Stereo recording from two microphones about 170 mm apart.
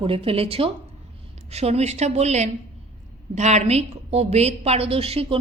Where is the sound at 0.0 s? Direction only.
35° right (ahead or behind).